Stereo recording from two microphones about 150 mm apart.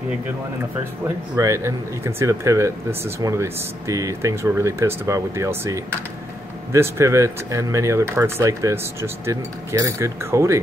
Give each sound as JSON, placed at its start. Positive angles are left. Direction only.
{"t": 1.3, "sound": "speech", "side_deg": -20}